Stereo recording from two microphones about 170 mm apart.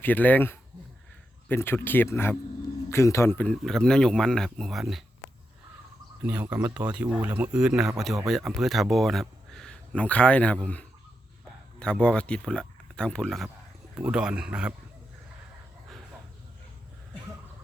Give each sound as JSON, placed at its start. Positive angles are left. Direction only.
{"t": 0.0, "sound": "speech", "side_deg": 10}
{"t": 6.2, "sound": "speech", "side_deg": -10}